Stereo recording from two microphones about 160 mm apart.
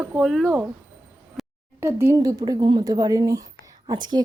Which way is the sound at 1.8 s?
15° right (ahead or behind).